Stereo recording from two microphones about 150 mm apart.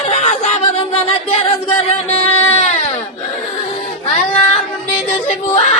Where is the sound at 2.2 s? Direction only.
45° left (ahead or behind).